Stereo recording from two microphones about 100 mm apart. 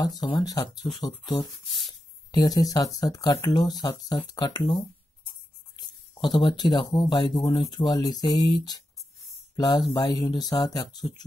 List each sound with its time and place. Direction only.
0.2 s speech: 45° left (ahead or behind)
5.8 s speech: 50° left (ahead or behind)